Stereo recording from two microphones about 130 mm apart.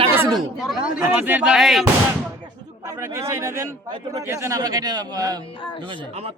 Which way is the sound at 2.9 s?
25° right (ahead or behind).